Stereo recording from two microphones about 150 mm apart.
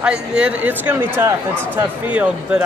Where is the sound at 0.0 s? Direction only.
5° right (ahead or behind).